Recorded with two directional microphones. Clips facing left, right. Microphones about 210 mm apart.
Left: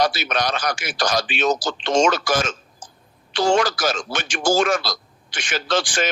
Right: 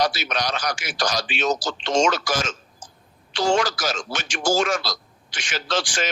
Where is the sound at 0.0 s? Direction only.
55° left (ahead or behind).